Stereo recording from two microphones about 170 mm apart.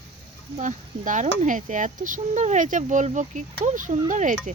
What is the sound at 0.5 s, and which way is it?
Speech, 45° right (ahead or behind).